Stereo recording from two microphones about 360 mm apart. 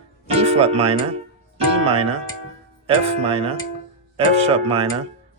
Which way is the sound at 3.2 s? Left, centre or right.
Centre.